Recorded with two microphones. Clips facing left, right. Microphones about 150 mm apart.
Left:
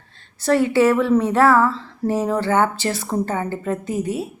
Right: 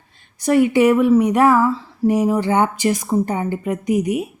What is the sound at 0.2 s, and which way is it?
A woman's voice, 15° right (ahead or behind).